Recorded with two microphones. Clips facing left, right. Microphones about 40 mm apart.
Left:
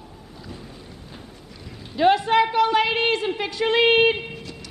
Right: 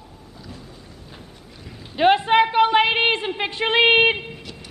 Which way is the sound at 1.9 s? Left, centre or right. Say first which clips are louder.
Right 2 dB; right.